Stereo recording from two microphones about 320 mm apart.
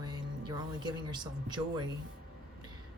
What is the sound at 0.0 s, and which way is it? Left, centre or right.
Speech, centre.